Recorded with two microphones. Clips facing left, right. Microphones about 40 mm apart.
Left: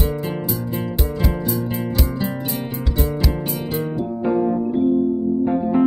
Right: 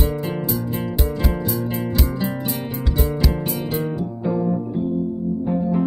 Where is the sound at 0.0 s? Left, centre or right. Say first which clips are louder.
Even; centre.